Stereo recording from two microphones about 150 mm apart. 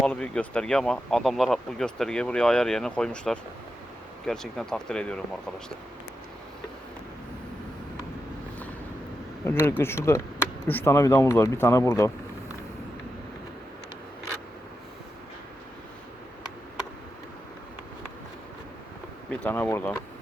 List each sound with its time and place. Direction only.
0.0 s speech: 5° left (ahead or behind)
9.4 s speech: 15° left (ahead or behind)
19.3 s speech: 10° left (ahead or behind)